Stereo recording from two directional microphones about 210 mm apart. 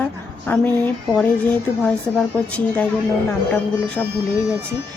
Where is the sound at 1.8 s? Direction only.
5° left (ahead or behind).